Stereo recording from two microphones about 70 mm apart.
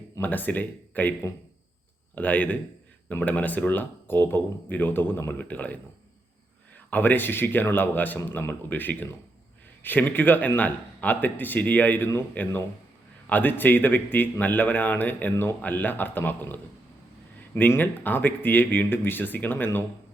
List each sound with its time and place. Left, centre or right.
0.2 s speech: left
2.1 s speech: left
13.2 s speech: left